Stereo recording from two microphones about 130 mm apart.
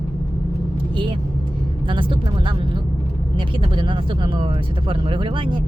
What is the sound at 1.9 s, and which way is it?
Speech, 40° right (ahead or behind).